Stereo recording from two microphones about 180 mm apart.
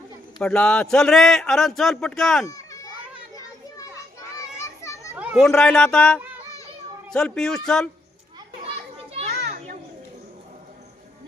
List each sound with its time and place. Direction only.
0.3 s a man's voice: 5° left (ahead or behind)
2.5 s children playing: 20° left (ahead or behind)
4.4 s children playing: 15° left (ahead or behind)
5.1 s a man's voice: 5° right (ahead or behind)
8.6 s children playing: 35° right (ahead or behind)